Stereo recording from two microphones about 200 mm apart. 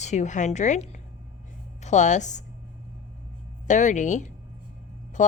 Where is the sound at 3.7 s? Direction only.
40° left (ahead or behind).